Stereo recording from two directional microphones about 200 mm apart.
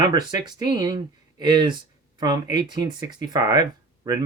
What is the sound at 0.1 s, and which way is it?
Speech, 20° right (ahead or behind).